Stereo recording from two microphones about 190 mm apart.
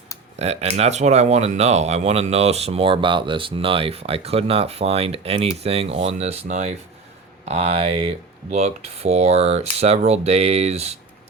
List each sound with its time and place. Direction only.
0.3 s speech: 35° right (ahead or behind)